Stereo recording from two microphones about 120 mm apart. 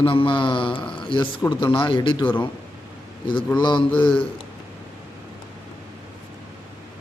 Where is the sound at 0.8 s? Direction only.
10° left (ahead or behind).